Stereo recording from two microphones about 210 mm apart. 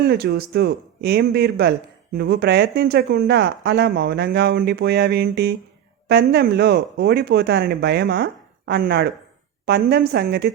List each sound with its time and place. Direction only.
0.0 s speech: 50° right (ahead or behind)